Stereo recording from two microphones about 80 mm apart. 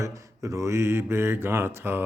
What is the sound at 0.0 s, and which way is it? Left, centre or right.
Speech, right.